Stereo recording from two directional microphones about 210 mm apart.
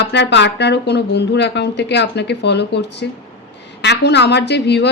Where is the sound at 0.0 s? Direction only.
55° left (ahead or behind).